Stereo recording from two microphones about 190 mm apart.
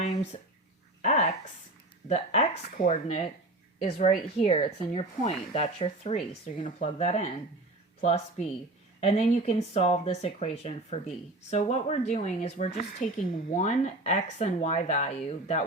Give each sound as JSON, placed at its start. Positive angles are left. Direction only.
{"t": 0.0, "sound": "a sound", "side_deg": 40}
{"t": 2.0, "sound": "speech", "side_deg": 35}
{"t": 12.9, "sound": "a woman's voice", "side_deg": 45}